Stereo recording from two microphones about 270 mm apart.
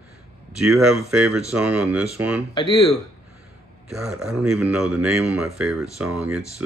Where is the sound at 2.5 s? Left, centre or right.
Centre.